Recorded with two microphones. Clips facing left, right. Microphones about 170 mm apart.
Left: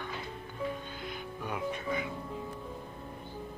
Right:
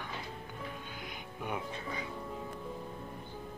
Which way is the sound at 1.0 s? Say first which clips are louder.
Left 1 dB; 20° right (ahead or behind).